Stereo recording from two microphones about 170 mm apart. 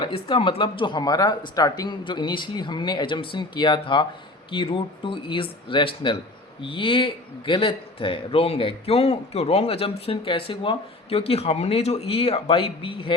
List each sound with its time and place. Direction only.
0.0 s a man's voice: 30° left (ahead or behind)